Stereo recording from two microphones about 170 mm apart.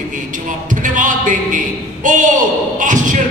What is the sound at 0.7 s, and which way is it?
A man's voice, 50° right (ahead or behind).